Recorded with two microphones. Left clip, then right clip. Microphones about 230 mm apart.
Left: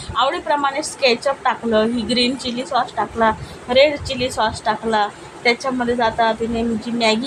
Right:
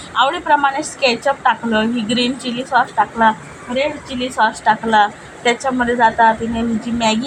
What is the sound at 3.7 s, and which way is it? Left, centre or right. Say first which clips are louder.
Speech: left 5 dB; left.